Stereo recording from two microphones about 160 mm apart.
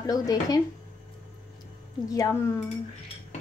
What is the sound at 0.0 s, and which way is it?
Speech, 25° left (ahead or behind).